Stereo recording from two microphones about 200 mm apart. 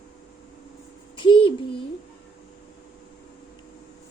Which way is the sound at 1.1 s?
25° left (ahead or behind).